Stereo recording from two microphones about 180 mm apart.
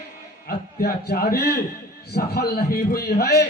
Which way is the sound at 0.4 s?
60° left (ahead or behind).